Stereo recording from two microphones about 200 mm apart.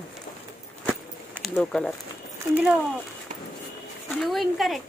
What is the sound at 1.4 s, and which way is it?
Speech, centre (ahead or behind).